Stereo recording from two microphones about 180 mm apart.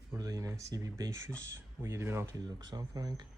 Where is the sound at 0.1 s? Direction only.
20° right (ahead or behind).